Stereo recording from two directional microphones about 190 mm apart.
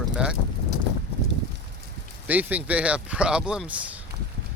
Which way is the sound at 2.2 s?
10° right (ahead or behind).